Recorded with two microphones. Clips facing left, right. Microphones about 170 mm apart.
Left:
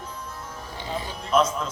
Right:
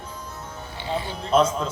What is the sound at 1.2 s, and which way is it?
Speech, 30° right (ahead or behind).